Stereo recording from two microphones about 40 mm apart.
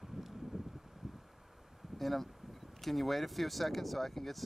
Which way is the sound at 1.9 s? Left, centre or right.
Centre.